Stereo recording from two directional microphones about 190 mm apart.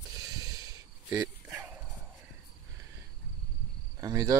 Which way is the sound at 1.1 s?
10° right (ahead or behind).